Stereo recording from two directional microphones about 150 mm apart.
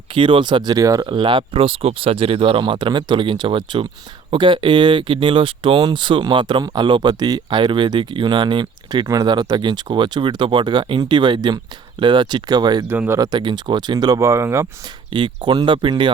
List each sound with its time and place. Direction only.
0.1 s speech: 35° right (ahead or behind)
1.0 s speech: 35° right (ahead or behind)
12.9 s speech: 15° right (ahead or behind)
15.1 s speech: 35° right (ahead or behind)